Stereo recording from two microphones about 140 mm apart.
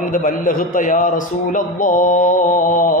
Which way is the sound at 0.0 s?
70° left (ahead or behind).